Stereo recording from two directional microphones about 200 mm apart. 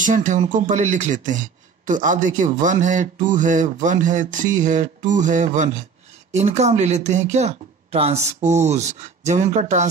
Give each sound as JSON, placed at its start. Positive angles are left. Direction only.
{"t": 0.0, "sound": "speech", "side_deg": -40}